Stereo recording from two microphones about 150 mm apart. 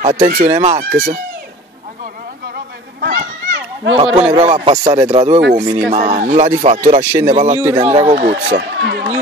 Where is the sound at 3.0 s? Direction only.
65° right (ahead or behind).